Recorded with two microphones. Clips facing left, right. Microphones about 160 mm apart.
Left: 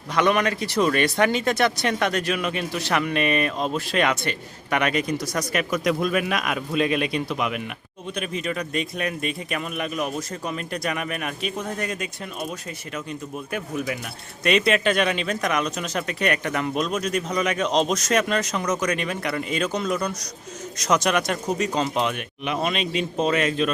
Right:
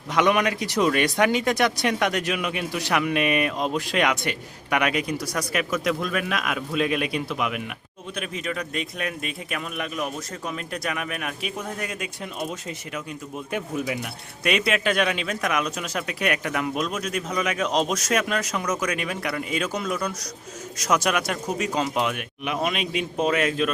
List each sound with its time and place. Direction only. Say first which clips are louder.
0.1 s speech: even; 15° right (ahead or behind)
13.5 s speech: right 1 dB; 20° right (ahead or behind)
14.4 s speech: left 3 dB; 5° right (ahead or behind)